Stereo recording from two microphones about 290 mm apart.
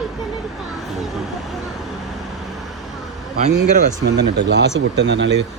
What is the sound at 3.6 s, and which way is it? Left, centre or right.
Speech, right.